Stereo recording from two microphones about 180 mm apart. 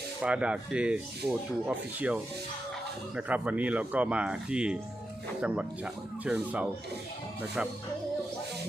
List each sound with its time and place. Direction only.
0.2 s speech: 5° right (ahead or behind)
3.2 s speech: 10° right (ahead or behind)